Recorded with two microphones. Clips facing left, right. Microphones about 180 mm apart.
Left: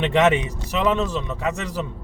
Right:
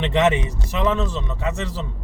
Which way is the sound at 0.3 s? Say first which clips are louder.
Left 1 dB; 20° left (ahead or behind).